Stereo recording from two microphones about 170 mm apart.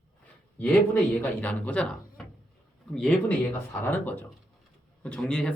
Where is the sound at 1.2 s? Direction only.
10° left (ahead or behind).